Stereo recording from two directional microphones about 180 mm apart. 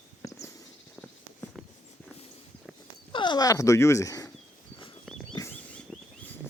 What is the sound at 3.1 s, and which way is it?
Speech, 25° left (ahead or behind).